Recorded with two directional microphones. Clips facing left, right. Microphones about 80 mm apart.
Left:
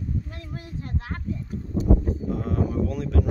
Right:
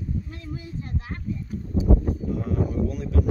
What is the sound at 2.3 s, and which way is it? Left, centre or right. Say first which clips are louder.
Speech: left 1 dB; left.